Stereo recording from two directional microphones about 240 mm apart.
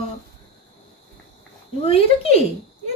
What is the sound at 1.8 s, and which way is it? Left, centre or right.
Speech, left.